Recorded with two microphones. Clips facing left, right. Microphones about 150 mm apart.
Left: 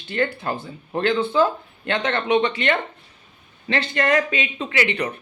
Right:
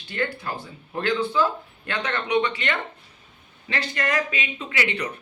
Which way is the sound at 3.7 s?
60° left (ahead or behind).